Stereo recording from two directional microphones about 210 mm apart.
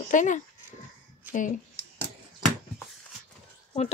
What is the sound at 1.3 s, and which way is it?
Speech, 10° right (ahead or behind).